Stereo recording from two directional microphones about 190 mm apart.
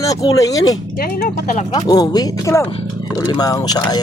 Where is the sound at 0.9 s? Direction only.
50° left (ahead or behind).